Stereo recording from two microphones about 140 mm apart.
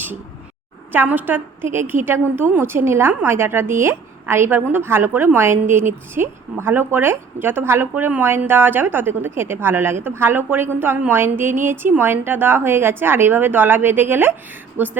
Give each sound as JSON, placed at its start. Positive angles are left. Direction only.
{"t": 0.9, "sound": "a woman's voice", "side_deg": -15}